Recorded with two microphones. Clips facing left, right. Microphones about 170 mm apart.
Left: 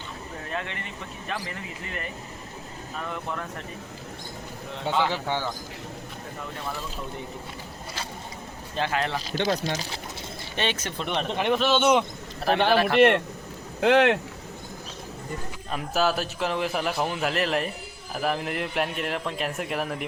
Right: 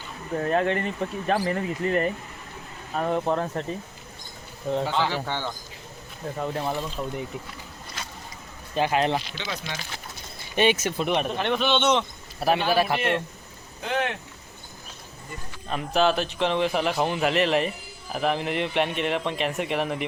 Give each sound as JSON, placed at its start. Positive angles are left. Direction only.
{"t": 0.3, "sound": "speech", "side_deg": -45}
{"t": 4.9, "sound": "a man's voice", "side_deg": 5}
{"t": 6.4, "sound": "speech", "side_deg": -35}
{"t": 8.7, "sound": "speech", "side_deg": -15}
{"t": 9.3, "sound": "speech", "side_deg": 45}
{"t": 10.5, "sound": "speech", "side_deg": -10}
{"t": 11.3, "sound": "a man's voice", "side_deg": 5}
{"t": 12.5, "sound": "a man's voice", "side_deg": 65}
{"t": 13.8, "sound": "speech", "side_deg": 75}
{"t": 15.7, "sound": "speech", "side_deg": 5}